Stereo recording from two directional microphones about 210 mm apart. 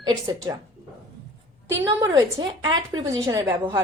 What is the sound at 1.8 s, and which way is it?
A woman's voice, 20° right (ahead or behind).